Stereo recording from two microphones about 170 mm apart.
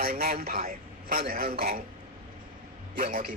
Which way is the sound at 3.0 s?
55° right (ahead or behind).